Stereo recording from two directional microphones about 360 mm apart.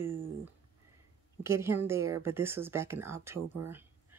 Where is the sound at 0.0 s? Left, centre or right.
Right.